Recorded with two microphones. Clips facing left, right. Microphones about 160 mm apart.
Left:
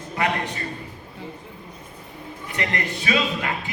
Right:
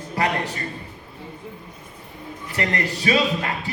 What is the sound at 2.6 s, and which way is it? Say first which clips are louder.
Speech: right 3 dB; 35° right (ahead or behind).